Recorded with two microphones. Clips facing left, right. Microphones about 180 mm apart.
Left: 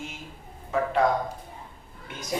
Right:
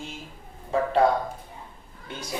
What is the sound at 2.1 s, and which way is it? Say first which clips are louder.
Speech: right 3 dB; 30° right (ahead or behind).